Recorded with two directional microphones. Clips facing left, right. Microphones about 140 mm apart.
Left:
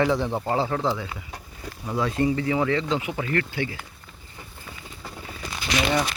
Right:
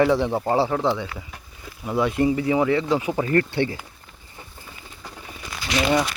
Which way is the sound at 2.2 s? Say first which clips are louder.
Right 2 dB; 25° right (ahead or behind).